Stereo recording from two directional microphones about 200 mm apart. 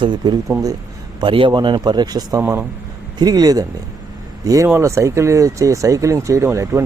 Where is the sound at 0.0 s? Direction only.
20° right (ahead or behind).